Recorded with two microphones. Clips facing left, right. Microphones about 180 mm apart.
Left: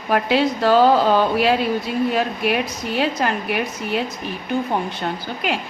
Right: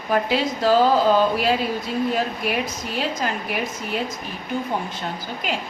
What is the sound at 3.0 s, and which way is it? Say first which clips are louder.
Speech: left 5 dB; 65° left (ahead or behind).